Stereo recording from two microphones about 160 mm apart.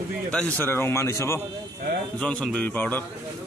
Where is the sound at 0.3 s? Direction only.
10° left (ahead or behind).